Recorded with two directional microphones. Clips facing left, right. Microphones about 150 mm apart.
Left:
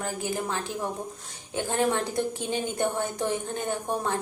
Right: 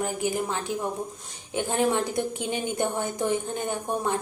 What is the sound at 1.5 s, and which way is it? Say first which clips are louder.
A woman's voice: right 1 dB; 15° right (ahead or behind).